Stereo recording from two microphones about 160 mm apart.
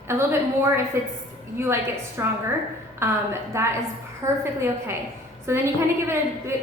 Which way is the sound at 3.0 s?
15° right (ahead or behind).